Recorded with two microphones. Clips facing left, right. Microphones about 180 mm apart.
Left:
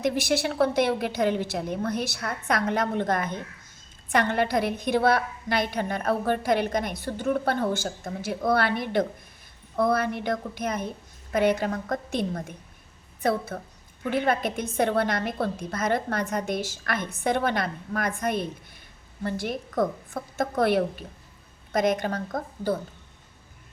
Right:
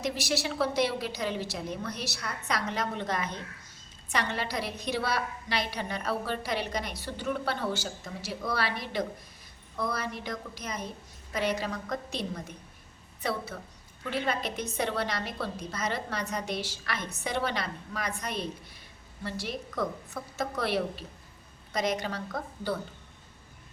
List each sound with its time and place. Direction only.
0.0 s a woman's voice: 55° left (ahead or behind)